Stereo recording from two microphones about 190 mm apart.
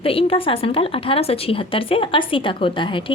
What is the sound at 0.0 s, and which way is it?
A woman's voice, 30° left (ahead or behind).